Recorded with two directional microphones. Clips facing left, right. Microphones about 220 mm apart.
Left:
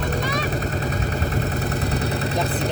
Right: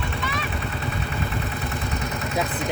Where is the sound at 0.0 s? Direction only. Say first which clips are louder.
Left 5 dB; 40° left (ahead or behind).